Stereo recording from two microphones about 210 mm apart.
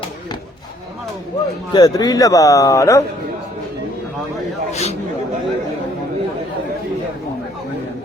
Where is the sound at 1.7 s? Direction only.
15° left (ahead or behind).